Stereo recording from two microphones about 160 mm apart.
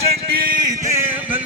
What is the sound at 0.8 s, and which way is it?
Music, 15° right (ahead or behind).